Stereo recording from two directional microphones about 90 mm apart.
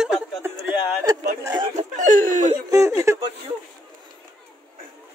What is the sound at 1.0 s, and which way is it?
Speech, 45° right (ahead or behind).